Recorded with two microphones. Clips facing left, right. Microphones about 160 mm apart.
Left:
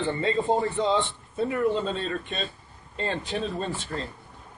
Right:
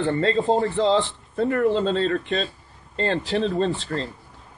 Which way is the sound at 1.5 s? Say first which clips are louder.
Right 4 dB; 75° right (ahead or behind).